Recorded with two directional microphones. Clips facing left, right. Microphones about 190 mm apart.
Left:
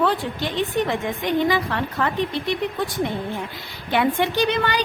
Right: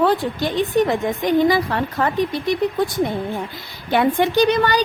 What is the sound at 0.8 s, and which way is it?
A woman's voice, 40° right (ahead or behind).